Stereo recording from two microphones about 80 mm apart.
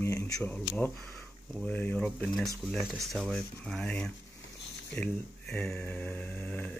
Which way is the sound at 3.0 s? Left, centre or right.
Centre.